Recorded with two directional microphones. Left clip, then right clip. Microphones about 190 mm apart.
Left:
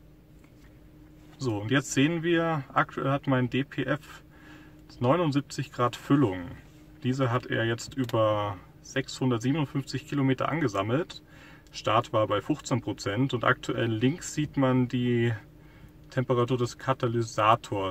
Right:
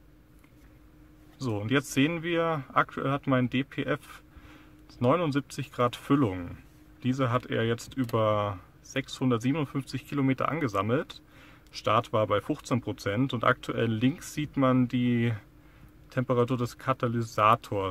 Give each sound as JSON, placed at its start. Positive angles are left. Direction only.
{"t": 1.4, "sound": "speech", "side_deg": -35}